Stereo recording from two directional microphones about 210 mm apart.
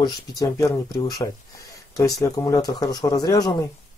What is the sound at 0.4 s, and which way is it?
Speech, 15° left (ahead or behind).